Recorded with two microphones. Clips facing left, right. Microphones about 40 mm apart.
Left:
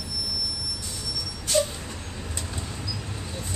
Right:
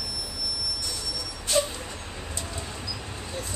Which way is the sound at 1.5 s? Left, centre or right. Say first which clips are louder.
Left 1 dB; right.